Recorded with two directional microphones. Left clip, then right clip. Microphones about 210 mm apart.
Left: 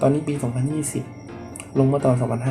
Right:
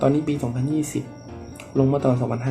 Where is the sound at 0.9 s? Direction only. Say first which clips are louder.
Right 1 dB; 5° right (ahead or behind).